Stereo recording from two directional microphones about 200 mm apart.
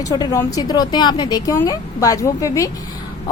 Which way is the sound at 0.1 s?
20° left (ahead or behind).